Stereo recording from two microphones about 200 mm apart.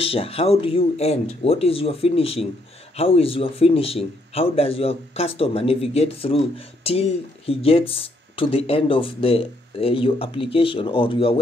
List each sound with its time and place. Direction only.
0.0 s speech: 30° left (ahead or behind)